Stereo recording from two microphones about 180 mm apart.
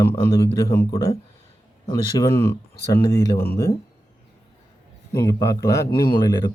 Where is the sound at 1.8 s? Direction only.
15° left (ahead or behind).